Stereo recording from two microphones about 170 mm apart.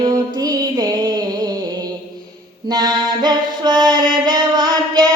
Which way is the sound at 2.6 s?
20° right (ahead or behind).